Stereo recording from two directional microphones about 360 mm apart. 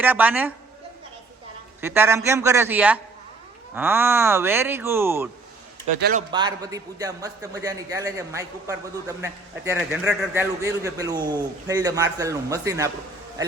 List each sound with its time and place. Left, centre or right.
0.0 s a woman's voice: centre
1.8 s a man's voice: centre
6.0 s a man's voice: right
6.3 s a man's voice: centre